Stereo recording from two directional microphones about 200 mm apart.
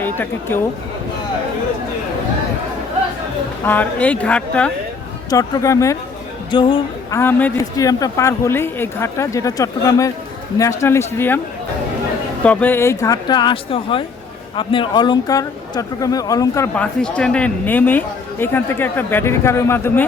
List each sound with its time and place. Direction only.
0.0 s speech: 10° left (ahead or behind)
3.6 s speech: 10° left (ahead or behind)
5.3 s speech: 15° left (ahead or behind)
7.2 s speech: 10° left (ahead or behind)
12.4 s speech: 5° left (ahead or behind)
16.7 s speech: 5° left (ahead or behind)